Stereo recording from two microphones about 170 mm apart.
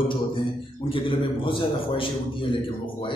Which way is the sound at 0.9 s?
30° left (ahead or behind).